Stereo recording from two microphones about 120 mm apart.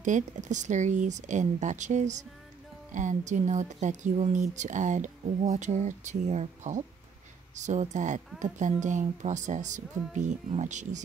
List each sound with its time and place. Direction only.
0.0 s speech: 90° right
2.9 s speech: 90° right